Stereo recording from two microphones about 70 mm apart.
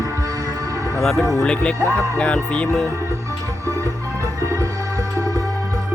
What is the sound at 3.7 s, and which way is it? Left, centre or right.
Music, right.